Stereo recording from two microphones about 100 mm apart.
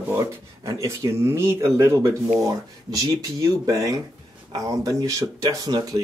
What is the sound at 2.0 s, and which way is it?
Speech, 40° right (ahead or behind).